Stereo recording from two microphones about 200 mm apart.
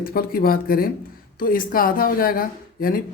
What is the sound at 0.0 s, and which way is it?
Speech, 45° left (ahead or behind).